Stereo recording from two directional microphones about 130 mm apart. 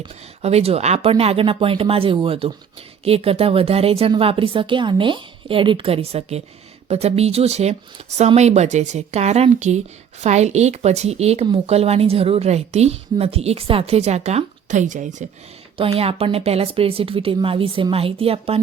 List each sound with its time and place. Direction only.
0.4 s a woman's voice: 50° right (ahead or behind); by 15.3 s 75° right (ahead or behind)
15.8 s a woman's voice: 50° right (ahead or behind)